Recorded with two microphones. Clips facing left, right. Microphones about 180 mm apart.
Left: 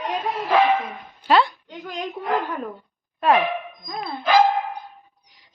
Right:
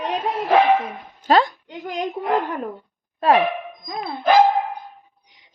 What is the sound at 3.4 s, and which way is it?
Speech, 20° right (ahead or behind).